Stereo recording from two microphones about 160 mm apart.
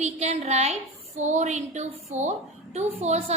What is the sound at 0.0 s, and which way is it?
A woman's voice, 45° right (ahead or behind).